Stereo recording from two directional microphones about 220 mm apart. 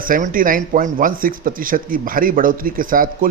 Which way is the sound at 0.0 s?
40° right (ahead or behind).